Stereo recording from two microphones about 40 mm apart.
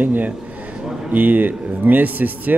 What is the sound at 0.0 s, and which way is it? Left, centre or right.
Speech, right.